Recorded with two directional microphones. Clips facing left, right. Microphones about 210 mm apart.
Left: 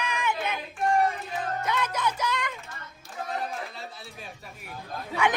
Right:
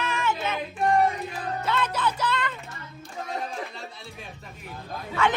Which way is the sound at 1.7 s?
10° left (ahead or behind).